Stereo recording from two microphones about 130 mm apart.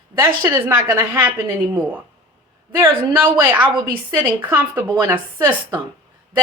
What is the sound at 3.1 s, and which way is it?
A woman's voice, 15° right (ahead or behind).